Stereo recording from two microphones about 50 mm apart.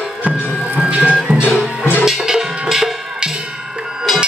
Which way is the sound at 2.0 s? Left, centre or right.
Centre.